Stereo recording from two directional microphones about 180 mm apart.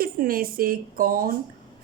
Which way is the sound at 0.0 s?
55° right (ahead or behind).